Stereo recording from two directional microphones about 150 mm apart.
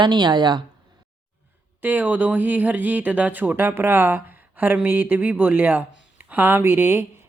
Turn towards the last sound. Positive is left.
turn(degrees=-15)  # may be behind; listen again after turning